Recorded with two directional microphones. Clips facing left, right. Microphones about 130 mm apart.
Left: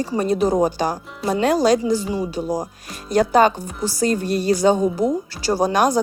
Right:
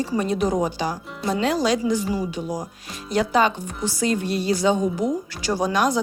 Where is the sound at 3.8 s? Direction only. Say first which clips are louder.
Left 3 dB; 40° left (ahead or behind).